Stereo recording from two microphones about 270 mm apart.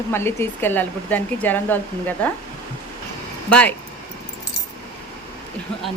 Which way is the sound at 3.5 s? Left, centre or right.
Centre.